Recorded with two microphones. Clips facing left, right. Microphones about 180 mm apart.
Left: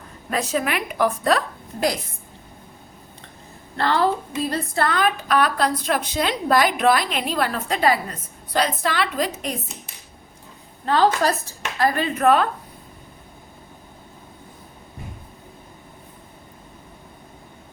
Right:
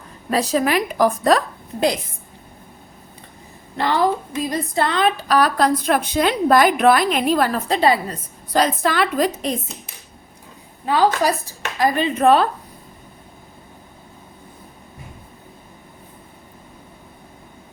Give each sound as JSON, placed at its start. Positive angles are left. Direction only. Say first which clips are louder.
{"t": 0.3, "sound": "a woman's voice", "louder": "right 5 dB", "side_deg": -35}
{"t": 3.8, "sound": "a woman's voice", "louder": "right 1 dB", "side_deg": -15}
{"t": 7.8, "sound": "a woman's voice", "louder": "right 2 dB", "side_deg": -30}
{"t": 8.5, "sound": "a woman's voice", "louder": "right 4 dB", "side_deg": -45}
{"t": 10.8, "sound": "speech", "louder": "right 1 dB", "side_deg": -10}